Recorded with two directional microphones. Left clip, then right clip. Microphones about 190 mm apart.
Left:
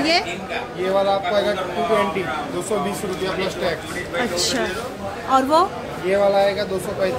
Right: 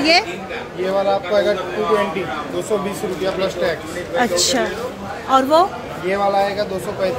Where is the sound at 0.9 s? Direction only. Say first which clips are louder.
Right 1 dB; 20° right (ahead or behind).